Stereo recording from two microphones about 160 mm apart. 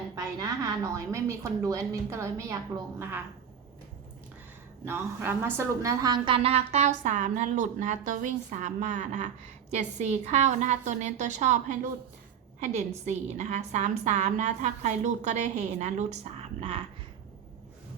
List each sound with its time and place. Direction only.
0.2 s a woman's voice: 20° right (ahead or behind)
4.9 s a woman's voice: 15° right (ahead or behind); by 16.8 s 35° right (ahead or behind)